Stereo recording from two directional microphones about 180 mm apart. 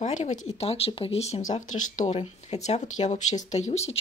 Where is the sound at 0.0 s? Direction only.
45° left (ahead or behind).